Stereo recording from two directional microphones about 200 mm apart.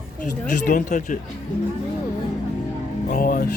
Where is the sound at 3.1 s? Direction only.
45° left (ahead or behind).